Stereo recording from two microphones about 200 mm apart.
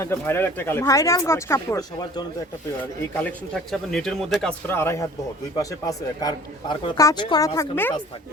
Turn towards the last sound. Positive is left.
turn(degrees=10)  # may be behind; listen again after turning